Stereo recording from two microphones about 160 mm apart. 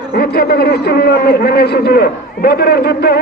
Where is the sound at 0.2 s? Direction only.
70° left (ahead or behind).